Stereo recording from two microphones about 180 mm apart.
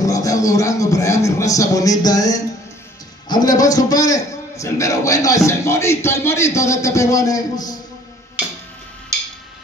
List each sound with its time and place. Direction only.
0.0 s a man's voice: 20° left (ahead or behind)